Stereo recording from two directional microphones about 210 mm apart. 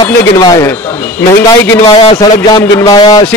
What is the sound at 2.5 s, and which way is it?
Speech, 20° left (ahead or behind).